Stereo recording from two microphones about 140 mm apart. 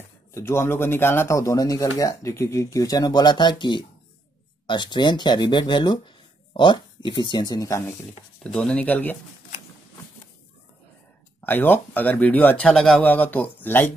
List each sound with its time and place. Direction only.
0.3 s speech: 20° left (ahead or behind)
8.4 s speech: 5° left (ahead or behind)
11.4 s speech: 15° left (ahead or behind)